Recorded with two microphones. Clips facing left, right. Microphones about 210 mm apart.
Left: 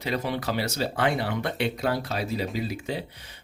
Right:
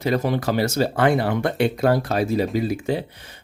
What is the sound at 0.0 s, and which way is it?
Speech, 45° right (ahead or behind).